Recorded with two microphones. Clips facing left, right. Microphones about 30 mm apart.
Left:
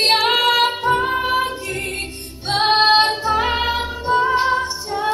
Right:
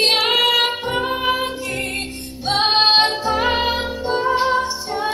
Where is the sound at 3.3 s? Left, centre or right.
Right.